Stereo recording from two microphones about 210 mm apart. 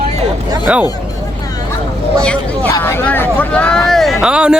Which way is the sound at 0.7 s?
5° right (ahead or behind).